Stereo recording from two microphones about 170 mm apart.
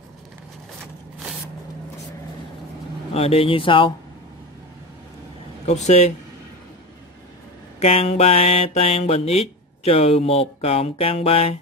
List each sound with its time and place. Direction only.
3.1 s speech: 35° left (ahead or behind)
5.7 s a man's voice: 40° left (ahead or behind)
7.8 s speech: 40° left (ahead or behind)